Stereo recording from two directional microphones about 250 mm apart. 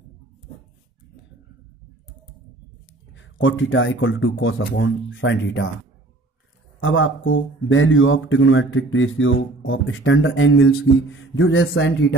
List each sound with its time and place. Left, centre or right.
3.2 s a man's voice: left
6.8 s a man's voice: left